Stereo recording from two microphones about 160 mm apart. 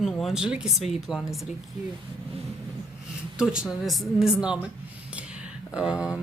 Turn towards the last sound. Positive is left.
turn(degrees=-5)  # may be behind; listen again after turning